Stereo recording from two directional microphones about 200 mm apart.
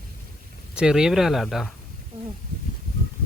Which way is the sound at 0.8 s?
5° right (ahead or behind).